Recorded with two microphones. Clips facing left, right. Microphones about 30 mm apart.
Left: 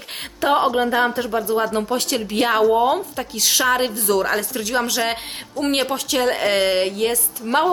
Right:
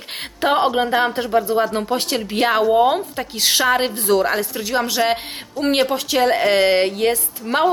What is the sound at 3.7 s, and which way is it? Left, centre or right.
Speech, centre.